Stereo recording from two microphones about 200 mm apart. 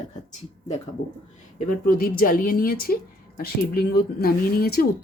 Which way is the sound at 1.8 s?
45° left (ahead or behind).